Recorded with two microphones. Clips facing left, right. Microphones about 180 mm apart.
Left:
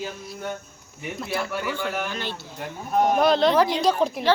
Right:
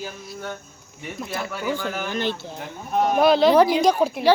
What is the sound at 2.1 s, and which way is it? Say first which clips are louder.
Speech: right 6 dB; 50° right (ahead or behind).